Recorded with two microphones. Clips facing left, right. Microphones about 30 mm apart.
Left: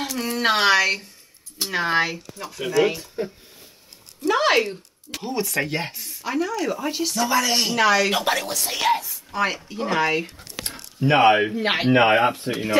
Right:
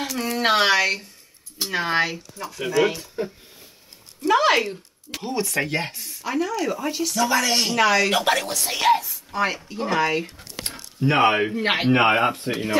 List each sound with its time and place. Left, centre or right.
0.1 s a woman's voice: centre
4.4 s a woman's voice: centre
6.9 s speech: centre
7.2 s a woman's voice: centre
11.1 s a woman's voice: centre